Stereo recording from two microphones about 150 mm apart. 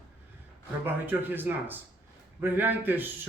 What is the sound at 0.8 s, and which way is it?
A man's voice, 15° right (ahead or behind).